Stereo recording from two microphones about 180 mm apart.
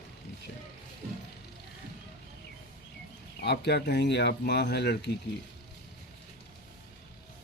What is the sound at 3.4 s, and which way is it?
Speech, 70° left (ahead or behind).